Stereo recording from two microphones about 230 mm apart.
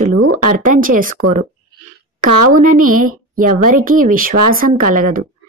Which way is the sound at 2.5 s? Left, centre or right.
Right.